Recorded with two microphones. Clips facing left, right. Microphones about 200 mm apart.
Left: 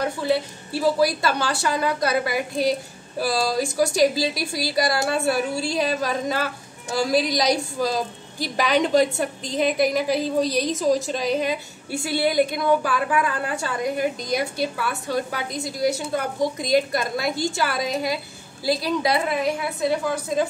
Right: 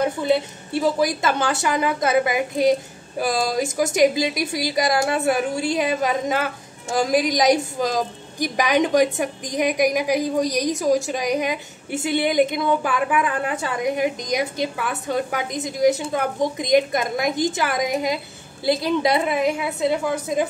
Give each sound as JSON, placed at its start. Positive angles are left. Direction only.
{"t": 0.0, "sound": "a woman's voice", "side_deg": -20}